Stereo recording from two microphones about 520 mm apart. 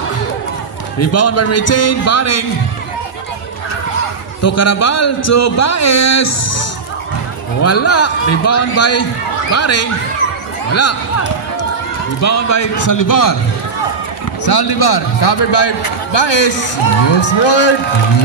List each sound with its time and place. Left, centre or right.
0.9 s a man's voice: left
4.4 s a man's voice: left
7.6 s a man's voice: left
12.2 s a man's voice: left
14.4 s a man's voice: left